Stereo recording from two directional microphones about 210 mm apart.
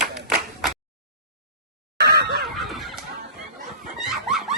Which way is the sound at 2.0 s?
50° right (ahead or behind).